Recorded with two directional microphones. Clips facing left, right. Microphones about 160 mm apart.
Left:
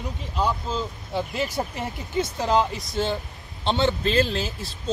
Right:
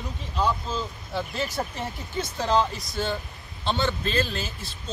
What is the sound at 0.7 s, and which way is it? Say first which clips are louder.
A man's voice: left 2 dB; 15° left (ahead or behind).